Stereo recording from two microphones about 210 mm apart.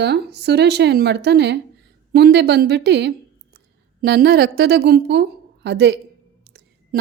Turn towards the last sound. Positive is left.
turn(degrees=-55)  # may be behind; listen again after turning